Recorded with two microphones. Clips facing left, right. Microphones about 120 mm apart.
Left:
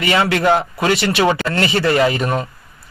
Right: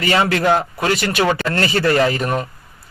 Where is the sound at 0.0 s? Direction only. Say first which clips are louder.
Even; 35° right (ahead or behind).